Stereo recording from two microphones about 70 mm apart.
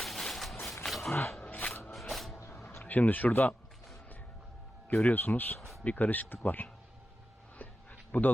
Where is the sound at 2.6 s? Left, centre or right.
Left.